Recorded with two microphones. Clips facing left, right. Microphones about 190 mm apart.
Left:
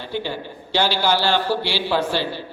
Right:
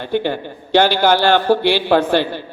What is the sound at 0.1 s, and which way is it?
A man's voice, 55° right (ahead or behind).